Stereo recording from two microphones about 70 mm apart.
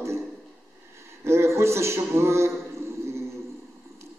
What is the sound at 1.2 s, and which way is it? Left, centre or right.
A man's voice, right.